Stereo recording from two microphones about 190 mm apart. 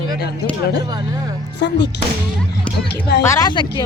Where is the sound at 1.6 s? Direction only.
65° left (ahead or behind).